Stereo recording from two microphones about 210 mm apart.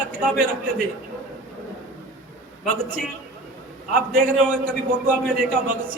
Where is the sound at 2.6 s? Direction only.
40° right (ahead or behind).